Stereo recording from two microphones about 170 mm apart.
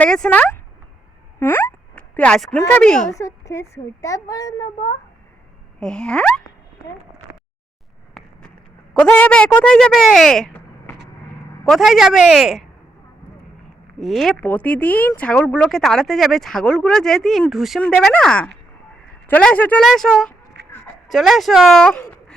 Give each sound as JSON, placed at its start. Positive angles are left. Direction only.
{"t": 0.0, "sound": "speech", "side_deg": 5}
{"t": 1.4, "sound": "a sound", "side_deg": 15}
{"t": 2.6, "sound": "speech", "side_deg": 5}
{"t": 3.1, "sound": "a woman's voice", "side_deg": 20}
{"t": 5.8, "sound": "speech", "side_deg": 5}
{"t": 8.1, "sound": "a sound", "side_deg": 5}
{"t": 11.7, "sound": "speech", "side_deg": 0}
{"t": 14.0, "sound": "speech", "side_deg": 0}
{"t": 20.6, "sound": "a sound", "side_deg": -85}
{"t": 21.1, "sound": "speech", "side_deg": 0}